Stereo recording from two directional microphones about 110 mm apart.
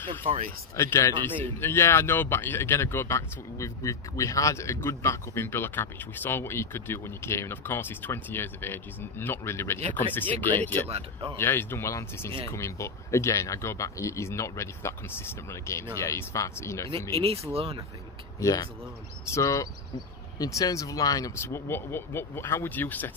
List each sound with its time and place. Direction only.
0.1 s speech: 55° right (ahead or behind)
0.7 s speech: 25° left (ahead or behind)
10.9 s speech: 60° right (ahead or behind)
11.3 s speech: 20° left (ahead or behind)
18.4 s speech: 35° left (ahead or behind)
21.5 s speech: 20° left (ahead or behind)